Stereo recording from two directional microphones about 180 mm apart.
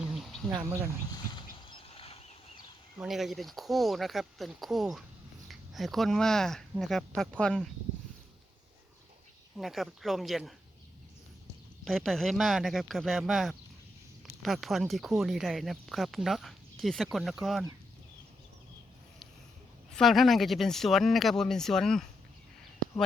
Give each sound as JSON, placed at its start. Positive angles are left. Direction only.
{"t": 0.5, "sound": "speech", "side_deg": -15}
{"t": 1.1, "sound": "a sound", "side_deg": 25}
{"t": 3.0, "sound": "speech", "side_deg": 0}
{"t": 9.6, "sound": "speech", "side_deg": 0}
{"t": 11.9, "sound": "speech", "side_deg": 0}
{"t": 19.9, "sound": "speech", "side_deg": 0}